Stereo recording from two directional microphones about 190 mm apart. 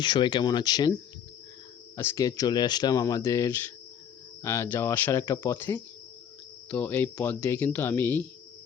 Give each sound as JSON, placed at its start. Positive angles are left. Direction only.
{"t": 0.0, "sound": "speech", "side_deg": 25}
{"t": 2.0, "sound": "speech", "side_deg": 15}